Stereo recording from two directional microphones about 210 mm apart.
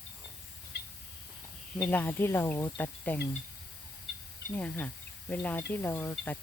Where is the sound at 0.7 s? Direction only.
55° left (ahead or behind).